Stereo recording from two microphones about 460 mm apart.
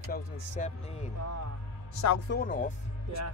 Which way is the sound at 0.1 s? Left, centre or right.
Centre.